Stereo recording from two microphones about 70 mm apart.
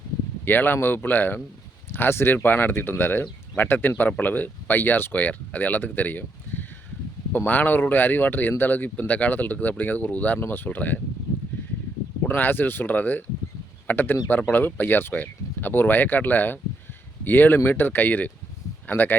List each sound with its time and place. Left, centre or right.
0.4 s speech: left
12.3 s speech: left